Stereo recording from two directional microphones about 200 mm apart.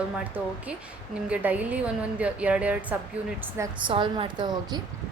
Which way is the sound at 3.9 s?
25° right (ahead or behind).